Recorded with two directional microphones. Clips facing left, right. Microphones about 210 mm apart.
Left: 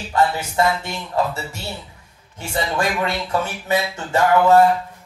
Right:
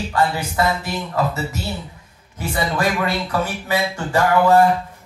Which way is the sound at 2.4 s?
25° left (ahead or behind).